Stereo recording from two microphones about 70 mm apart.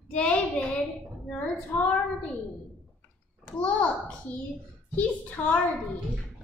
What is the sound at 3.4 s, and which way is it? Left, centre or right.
A woman's voice, centre.